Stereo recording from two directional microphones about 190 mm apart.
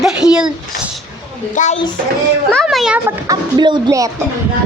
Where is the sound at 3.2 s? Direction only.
25° right (ahead or behind).